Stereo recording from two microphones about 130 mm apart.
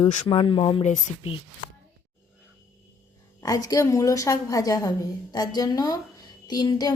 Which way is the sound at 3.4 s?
30° left (ahead or behind).